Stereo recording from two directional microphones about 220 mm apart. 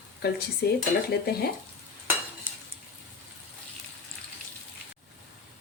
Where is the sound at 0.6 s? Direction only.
45° left (ahead or behind).